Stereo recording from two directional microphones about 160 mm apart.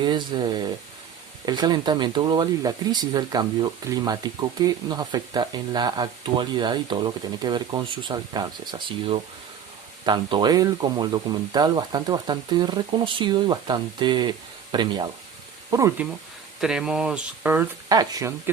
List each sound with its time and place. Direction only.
0.0 s speech: 30° right (ahead or behind)
16.6 s speech: 5° right (ahead or behind); by 18.5 s 20° right (ahead or behind)